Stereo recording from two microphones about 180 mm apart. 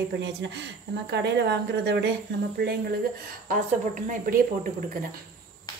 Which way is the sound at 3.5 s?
45° right (ahead or behind).